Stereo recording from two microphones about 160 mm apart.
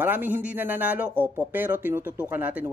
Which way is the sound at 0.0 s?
10° right (ahead or behind).